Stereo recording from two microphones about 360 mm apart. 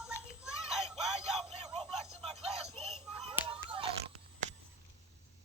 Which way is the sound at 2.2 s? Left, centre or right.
Centre.